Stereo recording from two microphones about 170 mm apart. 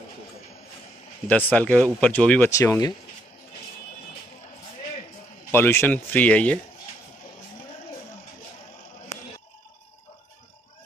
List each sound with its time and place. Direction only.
1.2 s speech: 10° left (ahead or behind)
5.5 s speech: 15° left (ahead or behind)